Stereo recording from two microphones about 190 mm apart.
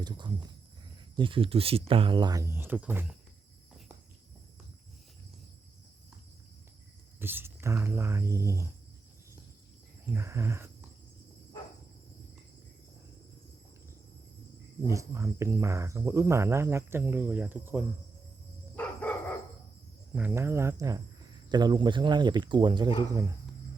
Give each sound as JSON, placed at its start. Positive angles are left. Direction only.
{"t": 0.0, "sound": "speech", "side_deg": -20}
{"t": 7.2, "sound": "speech", "side_deg": -10}
{"t": 10.2, "sound": "speech", "side_deg": -15}
{"t": 14.8, "sound": "speech", "side_deg": -15}
{"t": 18.8, "sound": "dog", "side_deg": 10}
{"t": 20.1, "sound": "speech", "side_deg": -10}